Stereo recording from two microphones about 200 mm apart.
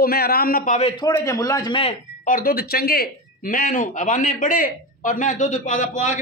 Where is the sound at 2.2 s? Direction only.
45° left (ahead or behind).